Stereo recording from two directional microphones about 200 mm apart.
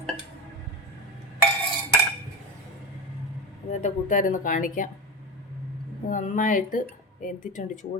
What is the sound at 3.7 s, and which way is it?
Speech, 35° left (ahead or behind).